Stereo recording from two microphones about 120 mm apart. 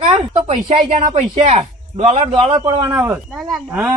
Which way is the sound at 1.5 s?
65° right (ahead or behind).